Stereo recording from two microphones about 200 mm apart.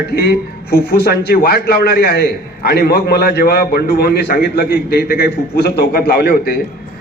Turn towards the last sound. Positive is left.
turn(degrees=50)  # may be behind; listen again after turning